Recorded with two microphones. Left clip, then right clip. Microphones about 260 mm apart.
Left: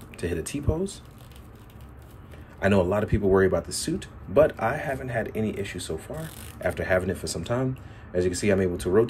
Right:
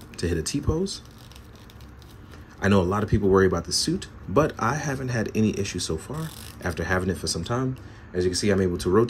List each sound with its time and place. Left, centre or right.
0.1 s speech: centre
2.6 s speech: centre